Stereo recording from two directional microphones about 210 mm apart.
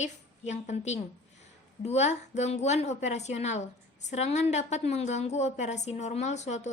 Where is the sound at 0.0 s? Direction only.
35° left (ahead or behind).